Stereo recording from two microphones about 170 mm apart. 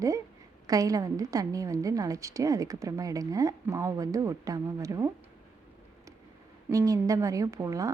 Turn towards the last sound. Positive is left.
turn(degrees=-20)  # may be behind; listen again after turning